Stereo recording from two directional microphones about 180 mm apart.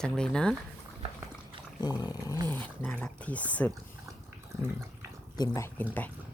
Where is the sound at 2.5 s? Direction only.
5° left (ahead or behind).